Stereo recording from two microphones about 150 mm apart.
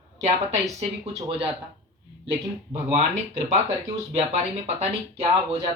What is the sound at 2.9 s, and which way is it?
Speech, 50° right (ahead or behind).